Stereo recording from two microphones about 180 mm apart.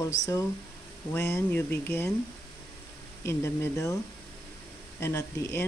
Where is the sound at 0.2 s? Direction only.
15° left (ahead or behind).